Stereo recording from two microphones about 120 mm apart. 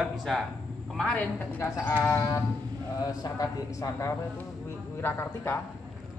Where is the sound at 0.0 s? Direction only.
Centre (ahead or behind).